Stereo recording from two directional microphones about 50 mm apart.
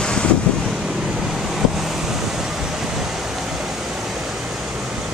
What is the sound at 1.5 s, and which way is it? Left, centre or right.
Vehicle, centre.